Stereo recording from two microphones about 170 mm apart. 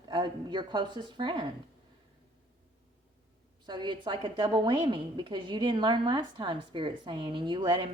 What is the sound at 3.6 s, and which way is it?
A woman's voice, 25° right (ahead or behind).